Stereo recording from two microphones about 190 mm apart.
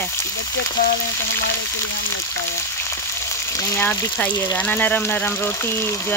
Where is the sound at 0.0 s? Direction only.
15° left (ahead or behind).